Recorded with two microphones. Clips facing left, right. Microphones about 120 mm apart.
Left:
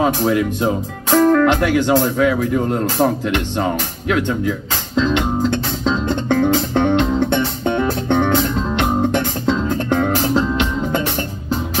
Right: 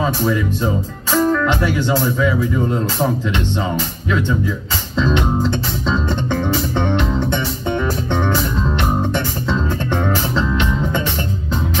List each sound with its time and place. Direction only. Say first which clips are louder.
1.1 s speech: left 4 dB; 55° left (ahead or behind)
6.2 s music: left 4 dB; 50° left (ahead or behind)